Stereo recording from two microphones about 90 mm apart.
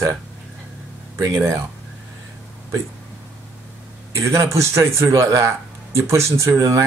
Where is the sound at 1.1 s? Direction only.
35° right (ahead or behind).